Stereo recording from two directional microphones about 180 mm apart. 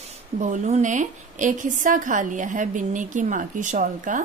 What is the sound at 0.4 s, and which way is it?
A woman's voice, 40° right (ahead or behind).